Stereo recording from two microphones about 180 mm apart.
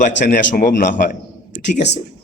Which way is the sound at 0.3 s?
50° left (ahead or behind).